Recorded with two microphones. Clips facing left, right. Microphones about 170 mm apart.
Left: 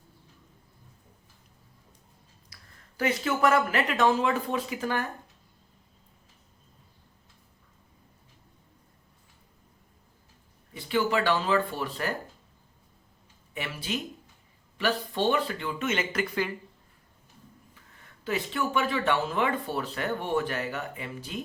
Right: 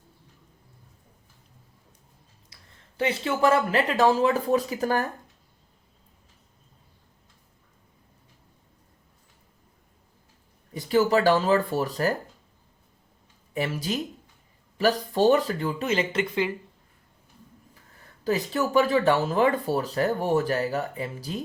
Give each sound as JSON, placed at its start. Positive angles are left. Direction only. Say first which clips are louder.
{"t": 3.0, "sound": "speech", "louder": "right 2 dB", "side_deg": -30}
{"t": 10.8, "sound": "speech", "louder": "right 5 dB", "side_deg": -40}
{"t": 13.5, "sound": "speech", "louder": "right 6 dB", "side_deg": -40}
{"t": 17.7, "sound": "speech", "louder": "right 2 dB", "side_deg": -35}